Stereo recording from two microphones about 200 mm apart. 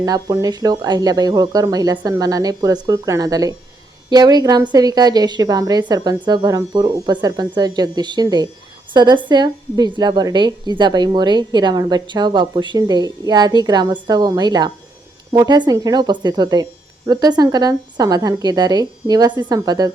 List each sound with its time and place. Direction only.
0.0 s a woman's voice: 20° right (ahead or behind)